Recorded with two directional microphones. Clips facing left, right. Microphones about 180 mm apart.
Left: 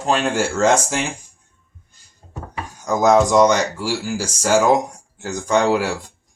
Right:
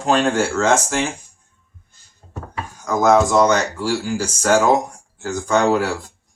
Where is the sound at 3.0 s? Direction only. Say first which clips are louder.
Left 1 dB; 20° left (ahead or behind).